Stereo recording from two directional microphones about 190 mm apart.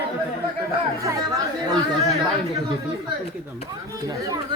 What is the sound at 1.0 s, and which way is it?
Speech, 20° right (ahead or behind).